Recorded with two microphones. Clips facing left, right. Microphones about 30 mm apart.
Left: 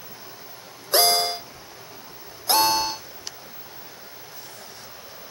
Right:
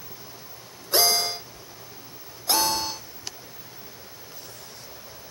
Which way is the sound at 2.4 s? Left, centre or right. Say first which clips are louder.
Left 4 dB; left.